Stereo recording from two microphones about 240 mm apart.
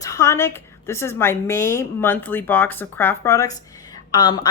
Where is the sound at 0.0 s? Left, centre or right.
Centre.